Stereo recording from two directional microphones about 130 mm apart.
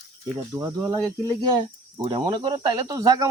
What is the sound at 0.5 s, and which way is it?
Speech, 25° right (ahead or behind).